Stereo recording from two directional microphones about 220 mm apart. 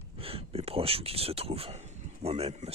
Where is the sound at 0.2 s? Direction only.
25° right (ahead or behind).